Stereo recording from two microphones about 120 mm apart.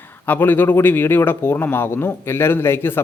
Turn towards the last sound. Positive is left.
turn(degrees=20)  # may be behind; listen again after turning